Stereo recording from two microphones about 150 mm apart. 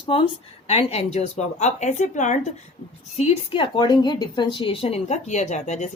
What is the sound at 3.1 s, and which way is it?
A woman's voice, 45° left (ahead or behind).